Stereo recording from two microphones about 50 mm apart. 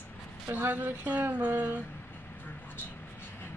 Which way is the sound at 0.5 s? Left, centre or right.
Right.